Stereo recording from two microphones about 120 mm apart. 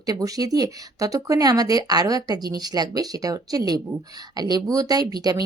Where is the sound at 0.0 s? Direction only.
30° right (ahead or behind).